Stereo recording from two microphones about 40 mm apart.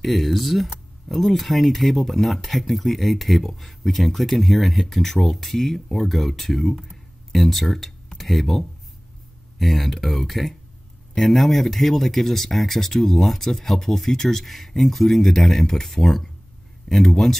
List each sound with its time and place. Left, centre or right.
0.0 s speech: centre